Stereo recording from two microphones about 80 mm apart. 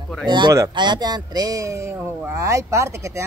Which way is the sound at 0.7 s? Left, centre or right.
Right.